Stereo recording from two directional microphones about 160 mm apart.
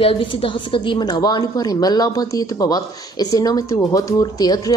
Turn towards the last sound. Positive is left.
turn(degrees=25)  # may be behind; listen again after turning